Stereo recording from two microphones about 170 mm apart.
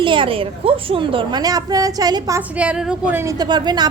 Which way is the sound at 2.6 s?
5° right (ahead or behind).